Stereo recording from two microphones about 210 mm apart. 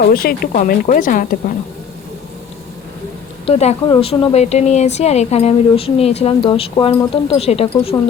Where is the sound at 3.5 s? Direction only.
30° left (ahead or behind).